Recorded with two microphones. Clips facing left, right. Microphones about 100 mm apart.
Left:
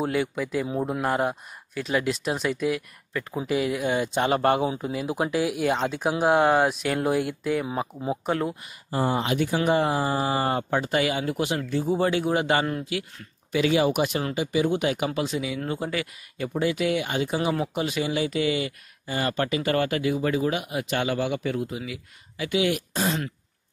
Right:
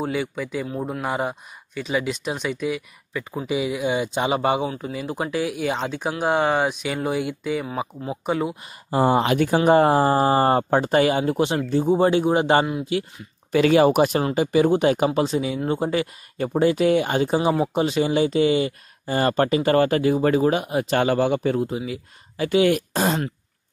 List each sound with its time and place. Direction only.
0.0 s speech: centre (ahead or behind)
8.9 s speech: 65° right (ahead or behind)
9.7 s speech: 45° right (ahead or behind); by 12.6 s 30° right (ahead or behind)
13.5 s speech: 50° right (ahead or behind)
14.8 s speech: 35° right (ahead or behind)